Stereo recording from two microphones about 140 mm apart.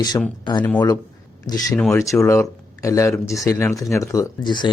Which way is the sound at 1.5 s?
25° left (ahead or behind).